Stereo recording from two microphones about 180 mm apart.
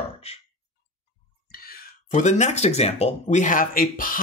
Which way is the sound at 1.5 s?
55° left (ahead or behind).